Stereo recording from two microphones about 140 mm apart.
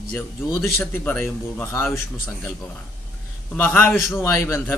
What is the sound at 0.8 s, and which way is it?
Speech, 15° left (ahead or behind).